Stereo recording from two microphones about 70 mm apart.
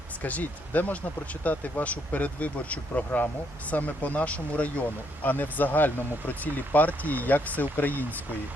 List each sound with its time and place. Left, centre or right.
0.2 s speech: left